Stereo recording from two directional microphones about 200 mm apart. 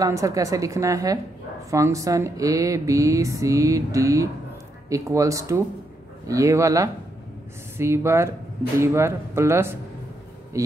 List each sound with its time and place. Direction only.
0.0 s speech: 15° right (ahead or behind)